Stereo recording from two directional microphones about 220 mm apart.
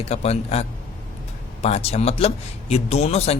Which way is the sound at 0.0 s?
30° left (ahead or behind).